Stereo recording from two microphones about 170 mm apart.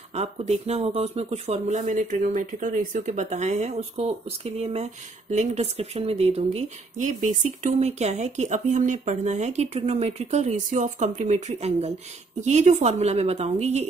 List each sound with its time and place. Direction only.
0.1 s speech: 40° right (ahead or behind)